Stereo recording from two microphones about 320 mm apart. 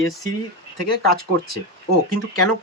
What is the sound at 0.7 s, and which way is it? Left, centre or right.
Speech, left.